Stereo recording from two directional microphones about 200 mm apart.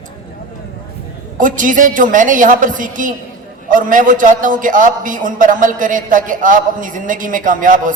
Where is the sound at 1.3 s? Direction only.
40° right (ahead or behind).